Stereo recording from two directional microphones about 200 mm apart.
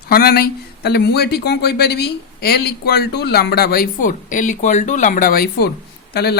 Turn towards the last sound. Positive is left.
turn(degrees=55)  # may be behind; listen again after turning